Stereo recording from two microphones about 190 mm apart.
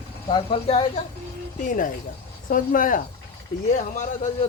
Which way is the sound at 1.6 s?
45° left (ahead or behind).